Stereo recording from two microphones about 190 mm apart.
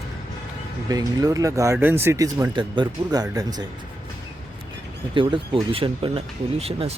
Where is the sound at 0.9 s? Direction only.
20° right (ahead or behind).